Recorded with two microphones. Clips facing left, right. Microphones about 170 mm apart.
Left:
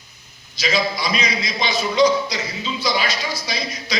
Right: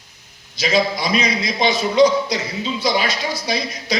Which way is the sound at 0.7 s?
55° right (ahead or behind).